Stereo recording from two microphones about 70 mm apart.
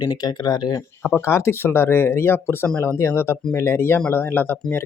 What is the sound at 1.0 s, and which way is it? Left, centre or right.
Speech, left.